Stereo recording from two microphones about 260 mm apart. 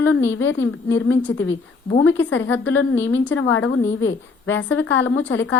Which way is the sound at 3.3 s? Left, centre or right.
Left.